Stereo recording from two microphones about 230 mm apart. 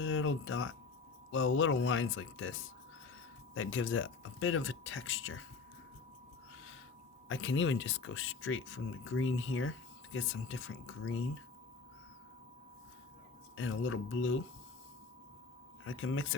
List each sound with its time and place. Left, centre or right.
0.0 s a sound: left
1.3 s speech: left
7.3 s speech: left
13.6 s speech: left
15.8 s speech: left